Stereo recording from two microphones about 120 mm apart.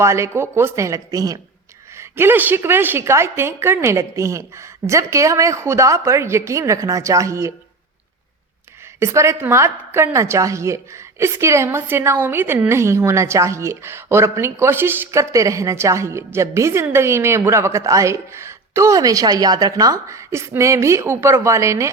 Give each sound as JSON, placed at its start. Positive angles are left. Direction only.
{"t": 0.0, "sound": "a woman's voice", "side_deg": -25}
{"t": 2.0, "sound": "a woman's voice", "side_deg": -20}
{"t": 9.0, "sound": "a woman's voice", "side_deg": -25}